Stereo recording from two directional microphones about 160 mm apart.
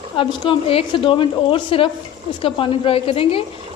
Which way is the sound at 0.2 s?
30° left (ahead or behind).